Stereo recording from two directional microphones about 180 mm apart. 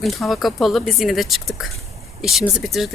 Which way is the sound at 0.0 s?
Centre (ahead or behind).